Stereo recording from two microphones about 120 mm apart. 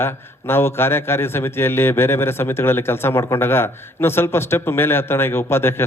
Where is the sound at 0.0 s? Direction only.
20° left (ahead or behind).